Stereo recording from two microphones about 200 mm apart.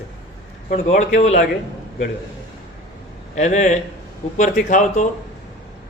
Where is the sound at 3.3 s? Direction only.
35° left (ahead or behind).